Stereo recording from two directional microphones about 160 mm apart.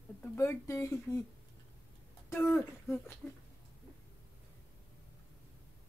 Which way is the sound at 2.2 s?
10° left (ahead or behind).